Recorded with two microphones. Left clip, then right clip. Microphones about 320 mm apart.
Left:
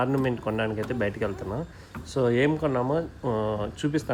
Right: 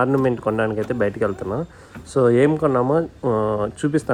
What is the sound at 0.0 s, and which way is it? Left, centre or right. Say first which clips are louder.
Speech: right 8 dB; right.